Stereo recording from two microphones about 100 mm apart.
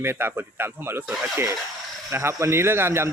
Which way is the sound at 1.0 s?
10° right (ahead or behind).